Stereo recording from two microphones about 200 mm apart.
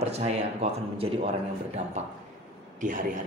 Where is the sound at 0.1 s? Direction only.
30° right (ahead or behind).